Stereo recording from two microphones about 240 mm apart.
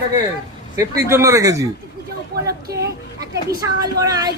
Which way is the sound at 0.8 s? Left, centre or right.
Centre.